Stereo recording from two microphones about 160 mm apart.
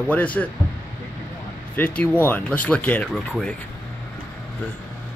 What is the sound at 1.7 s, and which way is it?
Speech, 10° left (ahead or behind).